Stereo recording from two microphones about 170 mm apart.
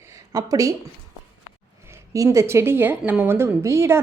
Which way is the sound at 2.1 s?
20° right (ahead or behind).